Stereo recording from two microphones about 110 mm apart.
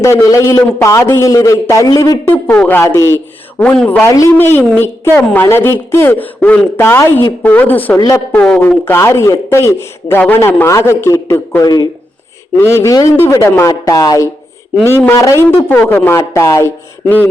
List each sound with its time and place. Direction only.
0.0 s a woman's voice: 30° left (ahead or behind)
2.2 s a woman's voice: 15° left (ahead or behind)
3.6 s a woman's voice: 10° left (ahead or behind)
7.9 s a woman's voice: 30° left (ahead or behind)
8.3 s speech: 10° left (ahead or behind)
8.8 s a woman's voice: 25° left (ahead or behind)
11.6 s a woman's voice: 40° left (ahead or behind)
12.5 s a woman's voice: 25° left (ahead or behind)
14.8 s a woman's voice: 25° left (ahead or behind)
15.5 s a woman's voice: 15° left (ahead or behind)